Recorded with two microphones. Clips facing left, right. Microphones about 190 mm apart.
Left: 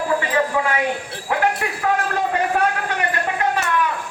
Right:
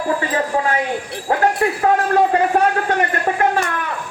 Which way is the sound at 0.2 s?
40° right (ahead or behind).